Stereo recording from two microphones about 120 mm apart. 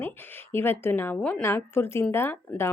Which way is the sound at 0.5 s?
20° left (ahead or behind).